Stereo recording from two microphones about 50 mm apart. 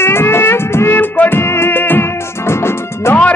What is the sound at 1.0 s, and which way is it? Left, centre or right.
Music, left.